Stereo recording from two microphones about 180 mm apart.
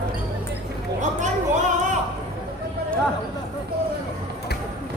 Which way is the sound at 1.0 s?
40° right (ahead or behind).